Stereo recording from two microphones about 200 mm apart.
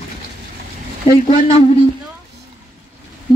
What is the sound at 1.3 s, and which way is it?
Speech, 30° left (ahead or behind).